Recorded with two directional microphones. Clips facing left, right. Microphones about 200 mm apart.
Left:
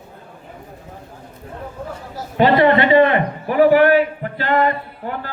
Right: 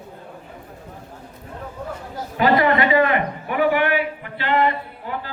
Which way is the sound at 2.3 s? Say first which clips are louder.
Left 4 dB; 25° left (ahead or behind).